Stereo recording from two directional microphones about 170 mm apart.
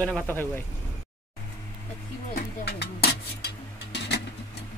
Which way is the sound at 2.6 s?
75° left (ahead or behind).